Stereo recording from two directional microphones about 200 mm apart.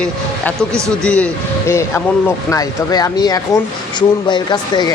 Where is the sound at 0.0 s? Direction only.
5° left (ahead or behind).